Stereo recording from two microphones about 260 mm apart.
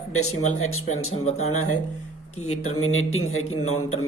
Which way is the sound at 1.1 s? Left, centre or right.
Left.